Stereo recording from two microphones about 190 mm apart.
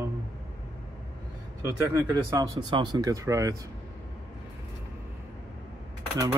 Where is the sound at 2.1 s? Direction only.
25° right (ahead or behind).